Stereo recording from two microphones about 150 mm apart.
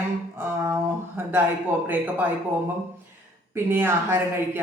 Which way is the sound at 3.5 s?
15° right (ahead or behind).